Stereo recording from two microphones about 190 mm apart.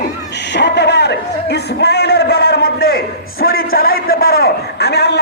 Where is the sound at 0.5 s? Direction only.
65° left (ahead or behind).